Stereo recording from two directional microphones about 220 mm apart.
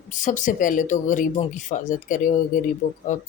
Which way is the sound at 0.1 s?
35° left (ahead or behind).